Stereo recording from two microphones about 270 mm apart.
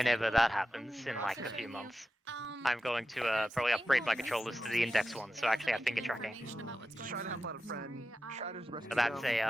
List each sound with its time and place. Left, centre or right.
0.0 s speech: centre
7.0 s speech: right
7.3 s speech: right
8.3 s a man's voice: right
8.9 s speech: centre